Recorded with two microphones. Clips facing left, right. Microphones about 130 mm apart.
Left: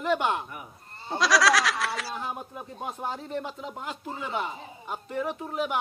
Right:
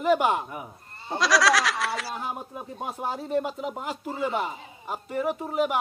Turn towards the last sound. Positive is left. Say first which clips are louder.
# right 4 dB
turn(degrees=-5)  # may be behind; listen again after turning